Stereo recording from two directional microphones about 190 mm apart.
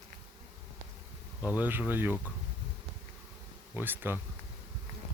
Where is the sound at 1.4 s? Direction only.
10° right (ahead or behind).